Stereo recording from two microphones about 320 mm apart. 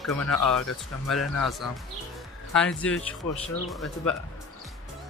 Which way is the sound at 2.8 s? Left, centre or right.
Centre.